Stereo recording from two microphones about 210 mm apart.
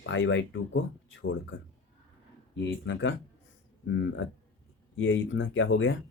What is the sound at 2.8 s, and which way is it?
Speech, 60° left (ahead or behind).